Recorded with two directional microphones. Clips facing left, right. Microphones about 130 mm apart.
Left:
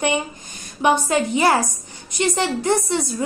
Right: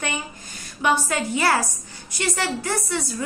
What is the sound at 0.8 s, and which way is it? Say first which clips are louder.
A woman's voice: left 4 dB; 20° left (ahead or behind).